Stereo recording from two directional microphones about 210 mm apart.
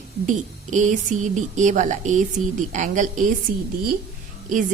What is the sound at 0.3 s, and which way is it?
A woman's voice, 35° right (ahead or behind).